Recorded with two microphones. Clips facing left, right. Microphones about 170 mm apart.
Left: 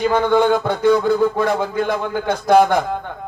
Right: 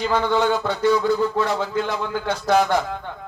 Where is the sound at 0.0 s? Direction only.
55° left (ahead or behind).